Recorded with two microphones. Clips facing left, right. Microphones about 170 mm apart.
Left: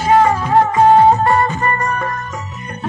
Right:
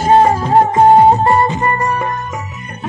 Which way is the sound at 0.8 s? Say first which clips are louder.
Right 1 dB; 20° right (ahead or behind).